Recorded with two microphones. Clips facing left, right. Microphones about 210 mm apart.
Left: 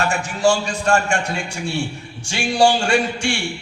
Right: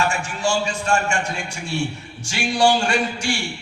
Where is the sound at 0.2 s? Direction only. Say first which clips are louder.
Left 5 dB; 35° left (ahead or behind).